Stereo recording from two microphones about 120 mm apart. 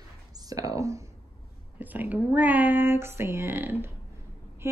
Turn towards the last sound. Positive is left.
turn(degrees=-15)  # may be behind; listen again after turning